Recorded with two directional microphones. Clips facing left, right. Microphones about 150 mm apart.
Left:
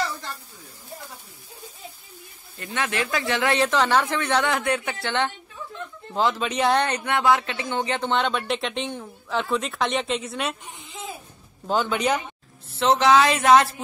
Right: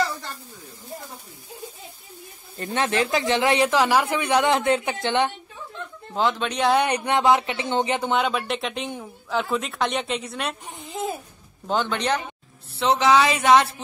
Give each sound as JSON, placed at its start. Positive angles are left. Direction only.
{"t": 2.5, "sound": "a woman's voice", "side_deg": -30}
{"t": 6.1, "sound": "speech", "side_deg": 0}
{"t": 6.8, "sound": "speech", "side_deg": -15}
{"t": 8.1, "sound": "speech", "side_deg": -5}
{"t": 10.6, "sound": "a sound", "side_deg": -40}
{"t": 11.6, "sound": "speech", "side_deg": 5}